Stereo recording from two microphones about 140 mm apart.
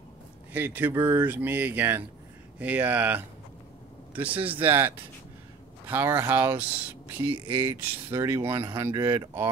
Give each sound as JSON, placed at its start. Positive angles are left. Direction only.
{"t": 0.5, "sound": "speech", "side_deg": -15}
{"t": 7.2, "sound": "speech", "side_deg": -40}
{"t": 7.8, "sound": "speech", "side_deg": -20}